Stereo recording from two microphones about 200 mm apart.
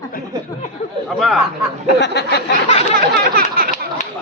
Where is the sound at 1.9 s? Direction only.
60° left (ahead or behind).